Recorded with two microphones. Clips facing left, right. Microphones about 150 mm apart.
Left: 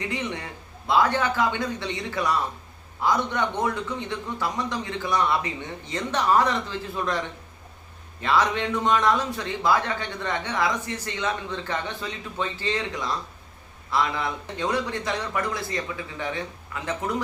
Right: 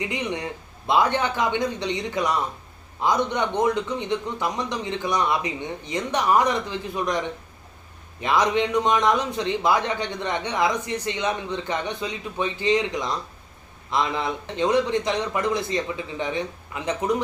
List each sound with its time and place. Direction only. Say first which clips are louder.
0.0 s a man's voice: right 3 dB; 15° right (ahead or behind)